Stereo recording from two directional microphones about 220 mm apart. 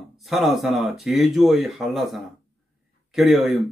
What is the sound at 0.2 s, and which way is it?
A man's voice, centre (ahead or behind).